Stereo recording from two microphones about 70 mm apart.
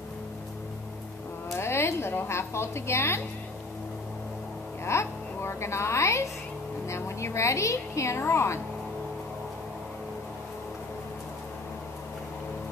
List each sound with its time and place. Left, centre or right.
1.6 s a woman's voice: left
4.8 s a woman's voice: left